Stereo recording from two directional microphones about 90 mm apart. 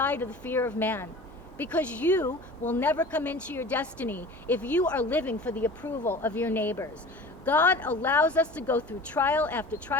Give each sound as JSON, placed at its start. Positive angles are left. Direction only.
{"t": 0.0, "sound": "a woman's voice", "side_deg": 20}